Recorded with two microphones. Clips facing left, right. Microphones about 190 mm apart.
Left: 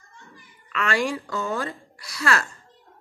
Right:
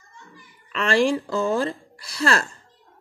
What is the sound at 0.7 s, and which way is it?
A woman's voice, 30° right (ahead or behind).